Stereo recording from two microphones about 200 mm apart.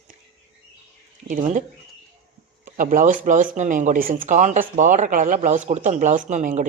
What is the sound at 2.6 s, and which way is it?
A woman's voice, 40° right (ahead or behind).